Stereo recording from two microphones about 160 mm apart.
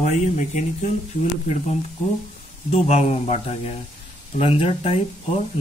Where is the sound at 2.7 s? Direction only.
40° left (ahead or behind).